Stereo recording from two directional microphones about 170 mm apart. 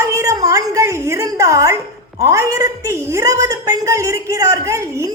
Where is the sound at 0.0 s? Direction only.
20° right (ahead or behind).